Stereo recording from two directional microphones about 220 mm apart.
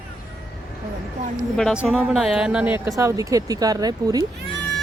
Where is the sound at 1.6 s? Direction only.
Centre (ahead or behind).